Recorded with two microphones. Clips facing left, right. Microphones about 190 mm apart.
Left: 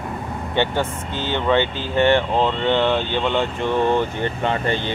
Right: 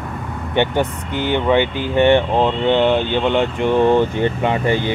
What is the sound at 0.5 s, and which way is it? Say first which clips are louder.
Speech: right 4 dB; 15° right (ahead or behind).